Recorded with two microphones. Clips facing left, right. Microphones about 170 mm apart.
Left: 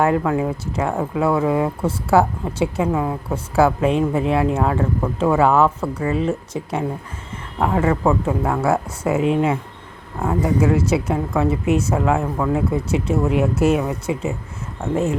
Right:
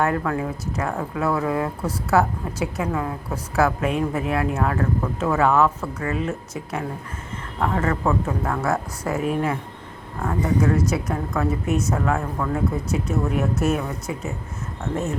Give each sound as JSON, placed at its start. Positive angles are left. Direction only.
{"t": 0.0, "sound": "speech", "side_deg": 20}
{"t": 7.6, "sound": "speech", "side_deg": 10}
{"t": 8.0, "sound": "speech", "side_deg": 25}
{"t": 10.2, "sound": "speech", "side_deg": 10}
{"t": 10.8, "sound": "speech", "side_deg": 25}
{"t": 13.8, "sound": "speech", "side_deg": 20}